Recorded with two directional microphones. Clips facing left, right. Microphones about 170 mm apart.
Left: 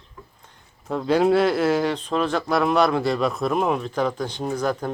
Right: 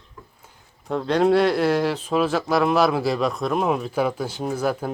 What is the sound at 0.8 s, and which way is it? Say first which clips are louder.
Speech: even; centre (ahead or behind).